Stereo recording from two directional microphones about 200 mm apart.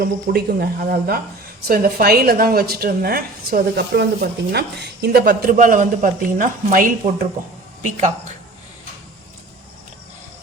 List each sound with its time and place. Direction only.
0.0 s a woman's voice: 50° right (ahead or behind)